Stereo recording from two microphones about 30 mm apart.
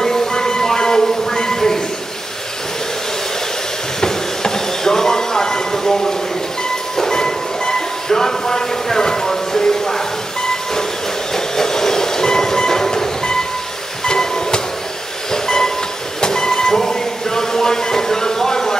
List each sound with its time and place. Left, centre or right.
0.0 s a sound: centre
4.0 s train: centre
14.0 s music: left
15.3 s train: centre